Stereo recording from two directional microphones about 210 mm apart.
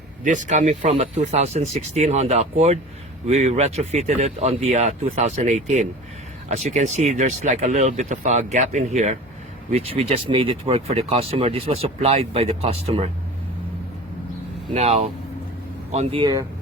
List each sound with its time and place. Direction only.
0.3 s speech: 35° right (ahead or behind)
14.7 s speech: 30° right (ahead or behind)